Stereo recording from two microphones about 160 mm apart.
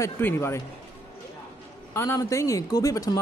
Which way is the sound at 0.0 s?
15° left (ahead or behind).